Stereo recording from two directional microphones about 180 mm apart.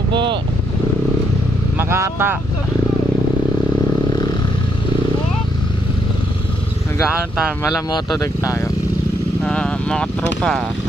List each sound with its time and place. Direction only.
0.1 s vehicle: 25° right (ahead or behind)
1.8 s speech: 15° right (ahead or behind)
7.6 s speech: 20° left (ahead or behind)
9.4 s speech: 5° left (ahead or behind)